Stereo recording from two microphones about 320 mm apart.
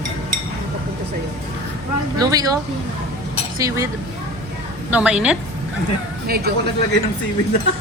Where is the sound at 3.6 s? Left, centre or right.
Centre.